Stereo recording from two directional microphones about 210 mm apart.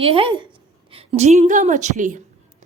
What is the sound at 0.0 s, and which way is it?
A woman's voice, 25° right (ahead or behind).